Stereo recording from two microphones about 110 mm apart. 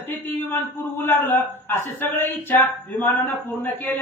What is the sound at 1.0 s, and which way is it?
A man's voice, 20° left (ahead or behind).